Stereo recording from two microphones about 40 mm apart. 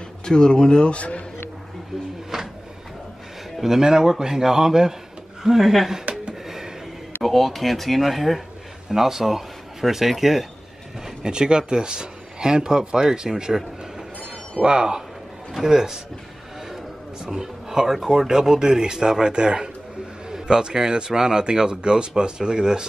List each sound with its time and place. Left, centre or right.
0.2 s a man's voice: centre
2.3 s printer: centre
3.6 s speech: centre
6.4 s a sound: centre
7.2 s speech: centre
11.1 s speech: centre
14.6 s speech: right
17.2 s speech: centre